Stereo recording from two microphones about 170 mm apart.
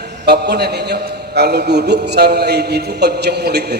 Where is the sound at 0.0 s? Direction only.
70° right (ahead or behind).